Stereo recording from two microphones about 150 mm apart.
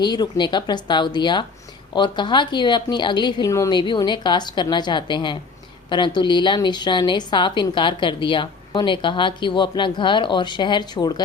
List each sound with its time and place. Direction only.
0.0 s a woman's voice: 30° left (ahead or behind)